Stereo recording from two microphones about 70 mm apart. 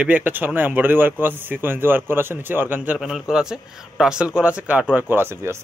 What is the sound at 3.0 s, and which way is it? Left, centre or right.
Speech, centre.